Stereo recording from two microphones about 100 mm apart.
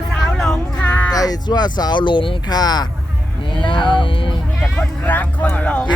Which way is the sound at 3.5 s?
55° left (ahead or behind).